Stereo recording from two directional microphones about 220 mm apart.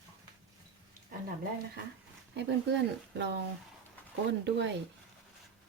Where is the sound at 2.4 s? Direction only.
50° right (ahead or behind).